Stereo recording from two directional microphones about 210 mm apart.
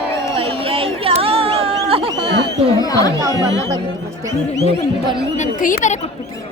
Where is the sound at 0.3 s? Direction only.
25° right (ahead or behind).